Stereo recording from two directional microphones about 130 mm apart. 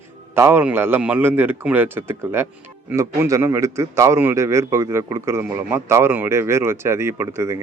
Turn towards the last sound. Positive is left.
turn(degrees=-20)  # may be behind; listen again after turning